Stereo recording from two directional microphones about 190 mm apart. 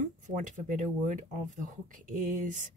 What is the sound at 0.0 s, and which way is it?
Speech, 40° right (ahead or behind).